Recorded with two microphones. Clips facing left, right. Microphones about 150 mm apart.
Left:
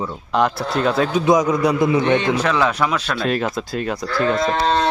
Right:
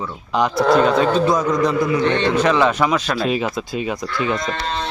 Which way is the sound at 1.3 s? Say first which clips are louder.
Left 2 dB; 10° left (ahead or behind).